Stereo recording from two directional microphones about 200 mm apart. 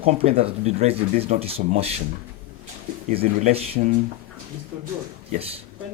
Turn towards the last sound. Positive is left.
turn(degrees=-30)  # may be behind; listen again after turning